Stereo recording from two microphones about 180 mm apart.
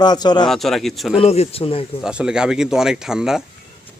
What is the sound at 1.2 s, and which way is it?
Speech, 35° left (ahead or behind).